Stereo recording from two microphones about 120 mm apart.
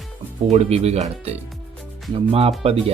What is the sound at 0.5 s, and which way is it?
Speech, 60° right (ahead or behind).